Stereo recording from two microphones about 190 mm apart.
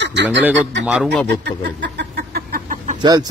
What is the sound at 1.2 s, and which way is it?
Chicken, 60° right (ahead or behind).